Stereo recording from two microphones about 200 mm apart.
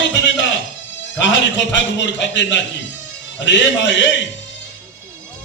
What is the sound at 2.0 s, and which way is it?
A man's voice, 65° left (ahead or behind).